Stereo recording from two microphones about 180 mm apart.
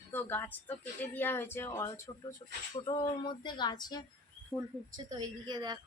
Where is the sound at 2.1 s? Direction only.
20° left (ahead or behind).